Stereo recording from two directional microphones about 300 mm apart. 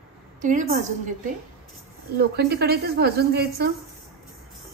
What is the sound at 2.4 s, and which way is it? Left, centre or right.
A woman's voice, right.